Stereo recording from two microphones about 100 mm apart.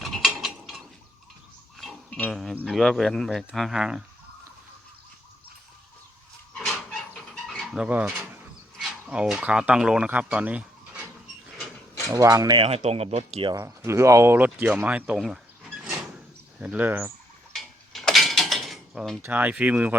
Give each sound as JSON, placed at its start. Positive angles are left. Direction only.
{"t": 0.0, "sound": "tick-tock", "side_deg": 0}
{"t": 2.0, "sound": "a sound", "side_deg": 15}
{"t": 2.3, "sound": "speech", "side_deg": 0}
{"t": 6.7, "sound": "dog", "side_deg": 5}
{"t": 7.9, "sound": "speech", "side_deg": -15}
{"t": 12.1, "sound": "speech", "side_deg": -35}
{"t": 12.5, "sound": "speech", "side_deg": -80}
{"t": 13.7, "sound": "speech", "side_deg": -30}
{"t": 14.3, "sound": "speech", "side_deg": -15}
{"t": 15.8, "sound": "sliding door", "side_deg": -5}
{"t": 17.5, "sound": "a sound", "side_deg": 0}
{"t": 19.2, "sound": "speech", "side_deg": -15}